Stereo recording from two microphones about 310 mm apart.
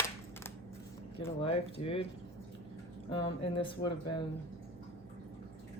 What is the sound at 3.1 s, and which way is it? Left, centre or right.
Speech, centre.